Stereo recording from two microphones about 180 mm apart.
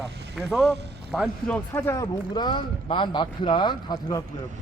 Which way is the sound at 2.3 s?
25° left (ahead or behind).